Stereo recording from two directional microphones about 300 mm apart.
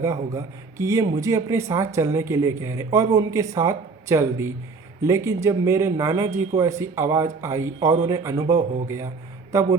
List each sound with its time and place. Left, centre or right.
0.0 s a man's voice: centre